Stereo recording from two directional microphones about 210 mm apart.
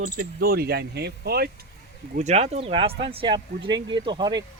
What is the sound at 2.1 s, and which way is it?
Speech, 35° right (ahead or behind).